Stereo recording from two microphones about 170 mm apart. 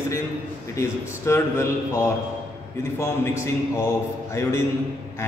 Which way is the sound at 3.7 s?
15° left (ahead or behind).